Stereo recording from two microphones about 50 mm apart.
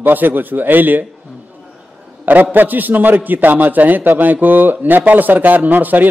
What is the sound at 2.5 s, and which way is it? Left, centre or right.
A man's voice, right.